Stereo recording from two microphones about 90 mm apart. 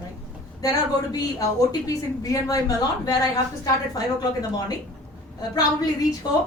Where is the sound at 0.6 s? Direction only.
45° left (ahead or behind).